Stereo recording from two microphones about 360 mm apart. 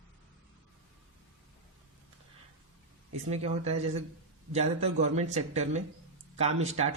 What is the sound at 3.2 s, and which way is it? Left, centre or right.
Speech, centre.